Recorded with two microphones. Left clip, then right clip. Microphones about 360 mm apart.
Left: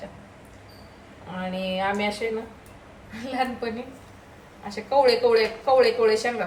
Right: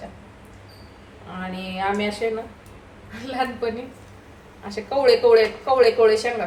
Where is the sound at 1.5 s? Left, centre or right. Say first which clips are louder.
Right 1 dB; centre.